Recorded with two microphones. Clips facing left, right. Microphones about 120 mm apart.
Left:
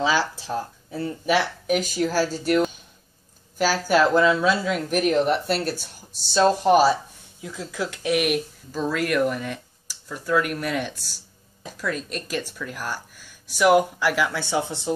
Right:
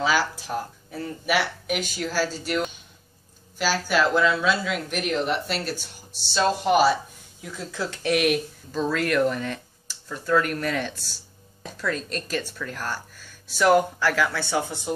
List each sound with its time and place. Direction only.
0.0 s speech: 30° left (ahead or behind)
1.7 s speech: 40° left (ahead or behind)
7.4 s speech: 15° left (ahead or behind)